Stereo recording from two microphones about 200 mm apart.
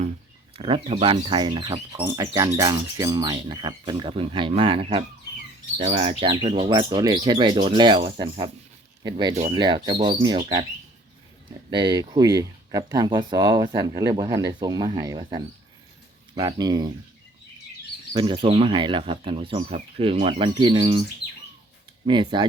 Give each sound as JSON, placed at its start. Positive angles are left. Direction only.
{"t": 0.5, "sound": "speech", "side_deg": -30}
{"t": 11.7, "sound": "speech", "side_deg": -20}
{"t": 18.1, "sound": "speech", "side_deg": -25}
{"t": 22.0, "sound": "speech", "side_deg": -25}